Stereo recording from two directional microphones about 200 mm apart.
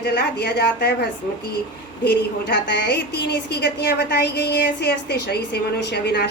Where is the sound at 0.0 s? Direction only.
55° left (ahead or behind).